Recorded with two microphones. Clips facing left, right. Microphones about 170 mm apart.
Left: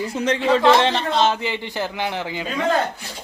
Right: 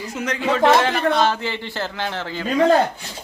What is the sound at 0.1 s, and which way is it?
A man's voice, 30° left (ahead or behind).